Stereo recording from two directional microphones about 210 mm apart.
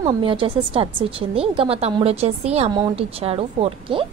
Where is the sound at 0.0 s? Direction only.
25° right (ahead or behind).